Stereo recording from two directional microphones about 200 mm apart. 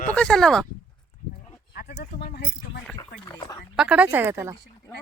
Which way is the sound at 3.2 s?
20° left (ahead or behind).